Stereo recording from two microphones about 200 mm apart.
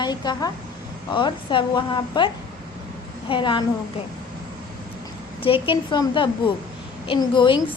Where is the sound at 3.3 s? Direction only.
25° left (ahead or behind).